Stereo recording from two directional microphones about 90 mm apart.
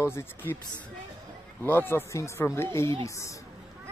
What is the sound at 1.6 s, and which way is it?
Speech, 25° left (ahead or behind).